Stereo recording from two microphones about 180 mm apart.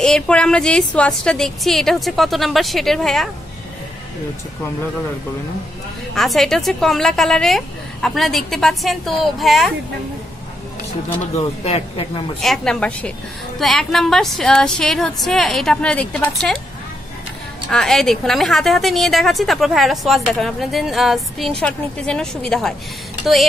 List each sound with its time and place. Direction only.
0.0 s a woman's voice: 5° left (ahead or behind)
6.1 s a woman's voice: centre (ahead or behind)
11.6 s speech: 35° left (ahead or behind)
12.4 s a woman's voice: 5° left (ahead or behind)
17.6 s a woman's voice: centre (ahead or behind)